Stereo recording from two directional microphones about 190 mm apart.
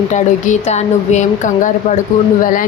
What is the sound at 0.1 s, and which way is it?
A woman's voice, 40° left (ahead or behind).